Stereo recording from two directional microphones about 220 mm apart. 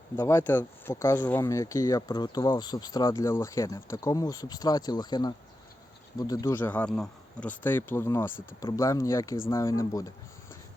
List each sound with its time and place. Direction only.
0.2 s speech: 10° left (ahead or behind)